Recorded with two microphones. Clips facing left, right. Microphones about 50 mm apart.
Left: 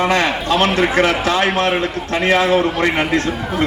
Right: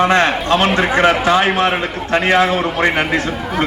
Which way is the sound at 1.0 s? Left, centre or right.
Right.